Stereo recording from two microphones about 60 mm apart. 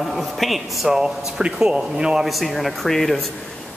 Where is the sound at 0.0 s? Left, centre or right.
Centre.